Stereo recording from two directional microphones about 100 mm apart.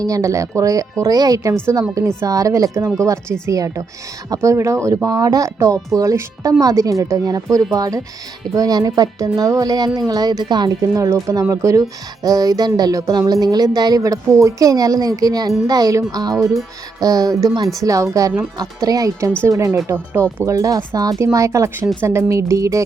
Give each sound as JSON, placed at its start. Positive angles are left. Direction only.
{"t": 0.0, "sound": "speech", "side_deg": -30}